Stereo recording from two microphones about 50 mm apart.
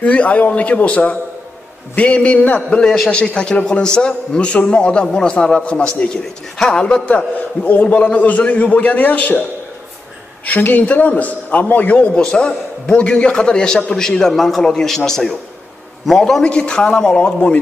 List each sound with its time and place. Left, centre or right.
0.0 s a man's voice: left
3.1 s a man's voice: left
6.8 s a man's voice: left
10.4 s a man's voice: left
12.3 s a man's voice: left
16.4 s a man's voice: centre